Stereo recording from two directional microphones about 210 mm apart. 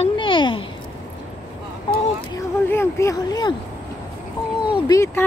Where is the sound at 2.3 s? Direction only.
10° left (ahead or behind).